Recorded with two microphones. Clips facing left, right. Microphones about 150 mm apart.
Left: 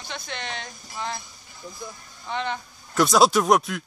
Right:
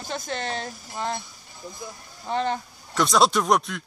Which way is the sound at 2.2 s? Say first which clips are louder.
Right 4 dB; 40° right (ahead or behind).